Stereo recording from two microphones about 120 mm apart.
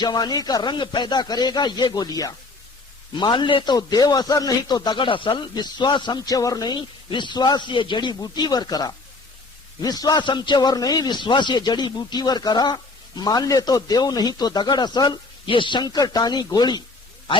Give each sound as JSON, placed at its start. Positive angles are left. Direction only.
{"t": 0.0, "sound": "a man's voice", "side_deg": 35}